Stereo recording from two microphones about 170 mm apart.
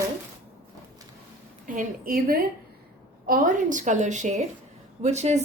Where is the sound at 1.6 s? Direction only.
50° right (ahead or behind).